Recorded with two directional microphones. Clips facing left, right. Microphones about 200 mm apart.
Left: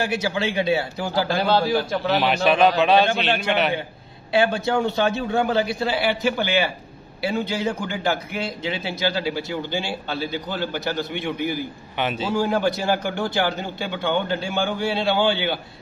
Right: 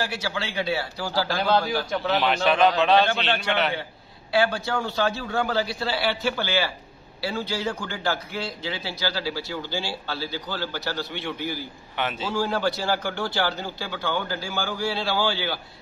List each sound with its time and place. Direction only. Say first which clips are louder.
0.0 s a man's voice: left 6 dB; 20° left (ahead or behind)
1.4 s a man's voice: left 2 dB; 5° left (ahead or behind); by 15.6 s 20° left (ahead or behind)